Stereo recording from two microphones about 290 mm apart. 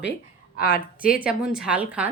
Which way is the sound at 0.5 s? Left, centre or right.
Left.